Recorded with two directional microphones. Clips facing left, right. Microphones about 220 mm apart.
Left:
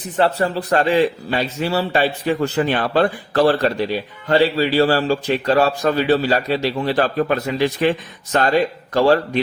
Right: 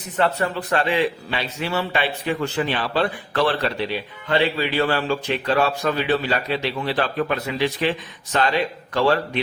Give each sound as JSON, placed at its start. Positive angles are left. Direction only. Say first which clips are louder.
{"t": 0.2, "sound": "a man's voice", "louder": "left 4 dB", "side_deg": 35}